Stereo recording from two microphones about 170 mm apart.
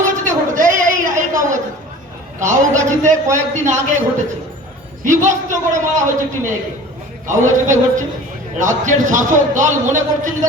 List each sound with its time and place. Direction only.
0.1 s a sound: 50° right (ahead or behind)
2.4 s a man's voice: 45° right (ahead or behind)
5.0 s a man's voice: 45° right (ahead or behind)